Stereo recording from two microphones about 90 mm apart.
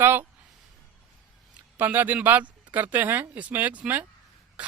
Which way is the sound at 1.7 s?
20° right (ahead or behind).